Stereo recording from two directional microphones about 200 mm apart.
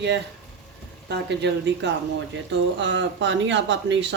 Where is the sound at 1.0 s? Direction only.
60° right (ahead or behind).